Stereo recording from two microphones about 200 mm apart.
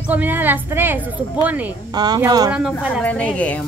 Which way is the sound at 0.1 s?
10° right (ahead or behind).